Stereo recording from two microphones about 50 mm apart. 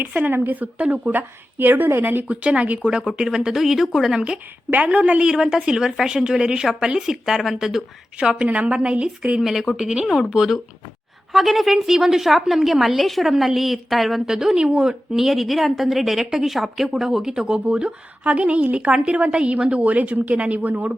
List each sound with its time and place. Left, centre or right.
0.0 s a woman's voice: right
2.2 s speech: right
2.8 s a woman's voice: centre
4.7 s speech: right
5.2 s a woman's voice: centre
8.2 s speech: centre
9.4 s a woman's voice: centre; by 20.9 s right